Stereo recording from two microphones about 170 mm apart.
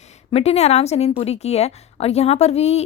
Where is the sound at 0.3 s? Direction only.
35° left (ahead or behind).